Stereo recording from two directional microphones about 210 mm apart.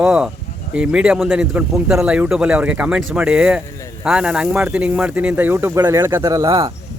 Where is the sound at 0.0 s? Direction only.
5° right (ahead or behind); by 6.7 s 25° right (ahead or behind).